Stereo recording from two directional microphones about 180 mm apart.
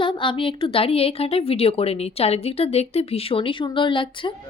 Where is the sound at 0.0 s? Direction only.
30° left (ahead or behind).